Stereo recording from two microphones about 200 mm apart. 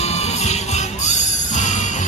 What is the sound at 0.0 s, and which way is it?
Music, 35° left (ahead or behind).